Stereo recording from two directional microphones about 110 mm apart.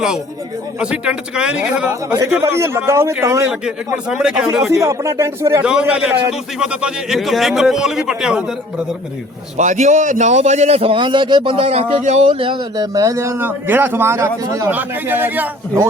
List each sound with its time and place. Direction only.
0.8 s speech: 10° right (ahead or behind)
2.4 s a man's voice: 25° right (ahead or behind)
3.5 s speech: 10° right (ahead or behind)
4.7 s a man's voice: 25° right (ahead or behind)
5.6 s speech: 10° right (ahead or behind)
9.6 s a man's voice: 90° right; by 10.9 s 70° right (ahead or behind)
10.9 s a man's voice: 45° right (ahead or behind); by 12.2 s 80° right
12.3 s a man's voice: 50° right (ahead or behind)
12.7 s a man's voice: 35° right (ahead or behind)
14.7 s a man's voice: 15° right (ahead or behind)